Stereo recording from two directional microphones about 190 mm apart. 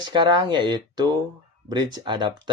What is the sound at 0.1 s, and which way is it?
Speech, 20° right (ahead or behind).